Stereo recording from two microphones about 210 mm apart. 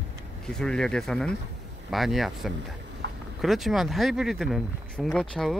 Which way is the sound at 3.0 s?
60° right (ahead or behind).